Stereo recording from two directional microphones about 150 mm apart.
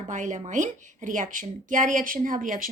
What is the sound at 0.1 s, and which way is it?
A woman's voice, 55° right (ahead or behind).